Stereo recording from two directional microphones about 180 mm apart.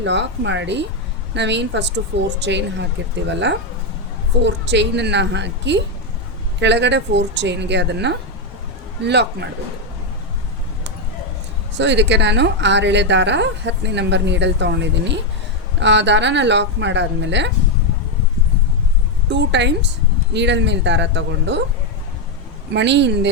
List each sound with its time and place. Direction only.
0.0 s speech: 80° right
4.4 s speech: 75° right (ahead or behind)
11.7 s speech: 80° right
19.3 s speech: 80° right
22.7 s speech: 75° right (ahead or behind)